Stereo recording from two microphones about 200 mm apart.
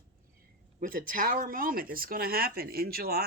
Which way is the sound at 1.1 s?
45° right (ahead or behind).